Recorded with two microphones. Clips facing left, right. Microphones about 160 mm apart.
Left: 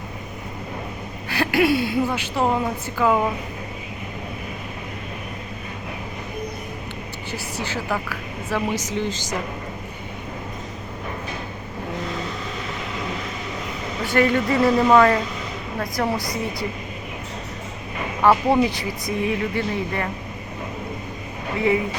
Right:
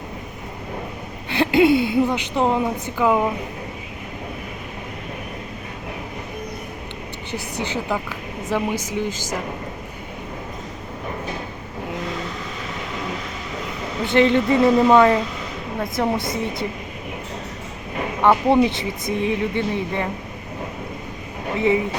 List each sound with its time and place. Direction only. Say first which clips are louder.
1.3 s a woman's voice: right 4 dB; 20° right (ahead or behind)
7.3 s a woman's voice: right 3 dB; 20° right (ahead or behind)
14.0 s a woman's voice: right 3 dB; 25° right (ahead or behind)
18.2 s speech: right 1 dB; 5° left (ahead or behind)
18.5 s a woman's voice: right 2 dB; 25° right (ahead or behind)